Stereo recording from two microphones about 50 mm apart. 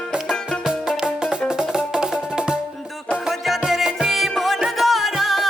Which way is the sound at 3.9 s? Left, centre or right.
Centre.